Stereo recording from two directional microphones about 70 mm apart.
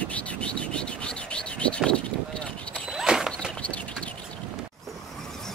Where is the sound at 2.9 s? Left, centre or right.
Centre.